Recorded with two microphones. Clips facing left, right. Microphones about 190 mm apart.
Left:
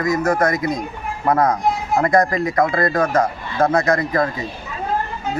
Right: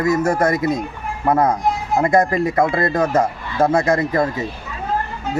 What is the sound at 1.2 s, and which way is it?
Speech, 10° right (ahead or behind).